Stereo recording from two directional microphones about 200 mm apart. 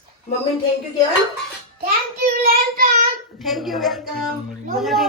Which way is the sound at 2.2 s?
45° right (ahead or behind).